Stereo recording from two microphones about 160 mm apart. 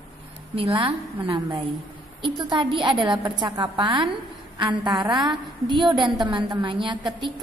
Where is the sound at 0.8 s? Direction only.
30° right (ahead or behind).